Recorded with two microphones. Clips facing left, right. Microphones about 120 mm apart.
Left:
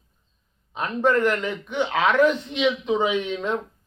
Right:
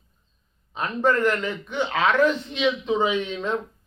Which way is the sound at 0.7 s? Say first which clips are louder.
Left 1 dB; 15° left (ahead or behind).